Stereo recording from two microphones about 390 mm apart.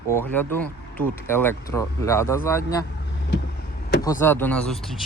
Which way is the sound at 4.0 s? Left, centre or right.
Centre.